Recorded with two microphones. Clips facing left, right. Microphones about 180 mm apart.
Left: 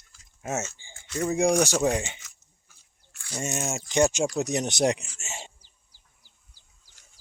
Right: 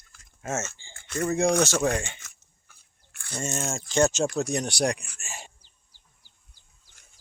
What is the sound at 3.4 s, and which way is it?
Speech, 15° left (ahead or behind).